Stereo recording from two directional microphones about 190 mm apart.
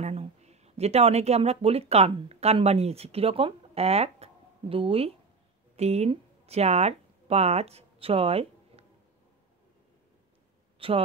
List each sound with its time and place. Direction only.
0.0 s speech: 35° right (ahead or behind)
10.8 s a man's voice: 30° right (ahead or behind)